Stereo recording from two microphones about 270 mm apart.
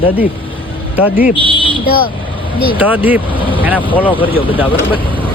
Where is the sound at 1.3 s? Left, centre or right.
Centre.